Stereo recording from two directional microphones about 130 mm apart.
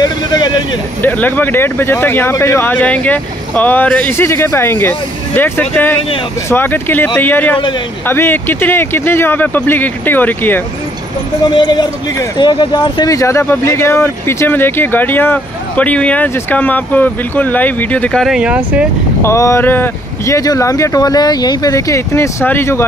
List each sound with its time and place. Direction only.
0.0 s vehicle: 30° left (ahead or behind)
1.0 s speech: 15° left (ahead or behind)
11.5 s speech: 30° left (ahead or behind)
13.1 s speech: 25° left (ahead or behind); by 18.3 s 5° left (ahead or behind)
18.3 s speech: 10° right (ahead or behind)
19.2 s speech: 20° left (ahead or behind)